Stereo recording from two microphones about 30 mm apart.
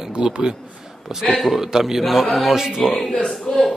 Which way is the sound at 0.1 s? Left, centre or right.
Right.